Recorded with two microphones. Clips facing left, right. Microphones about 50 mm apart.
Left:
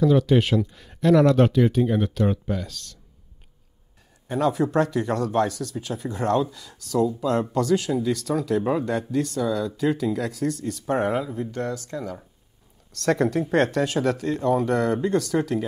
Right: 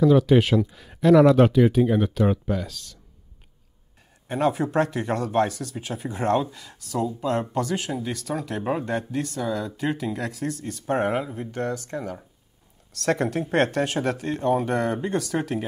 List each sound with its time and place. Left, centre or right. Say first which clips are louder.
0.0 s speech: right 2 dB; centre
4.3 s speech: left 1 dB; centre
8.4 s speech: left 2 dB; right
11.5 s speech: right 1 dB; right
13.0 s speech: left 2 dB; centre